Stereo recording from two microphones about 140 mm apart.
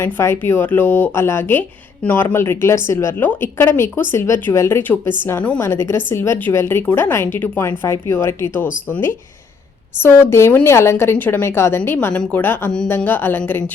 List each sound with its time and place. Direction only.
0.0 s speech: 15° left (ahead or behind)